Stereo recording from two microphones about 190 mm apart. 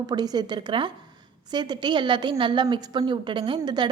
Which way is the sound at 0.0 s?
20° right (ahead or behind).